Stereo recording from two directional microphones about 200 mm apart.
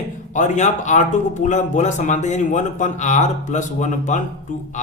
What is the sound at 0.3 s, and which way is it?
Speech, 35° left (ahead or behind).